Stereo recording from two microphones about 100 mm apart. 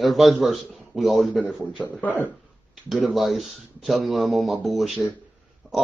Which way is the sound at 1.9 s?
15° left (ahead or behind).